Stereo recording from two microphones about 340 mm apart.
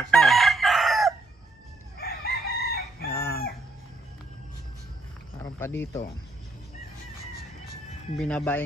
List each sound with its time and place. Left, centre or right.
0.0 s chicken: centre
2.0 s chicken: left
3.1 s chicken: centre
5.4 s speech: centre
8.2 s speech: centre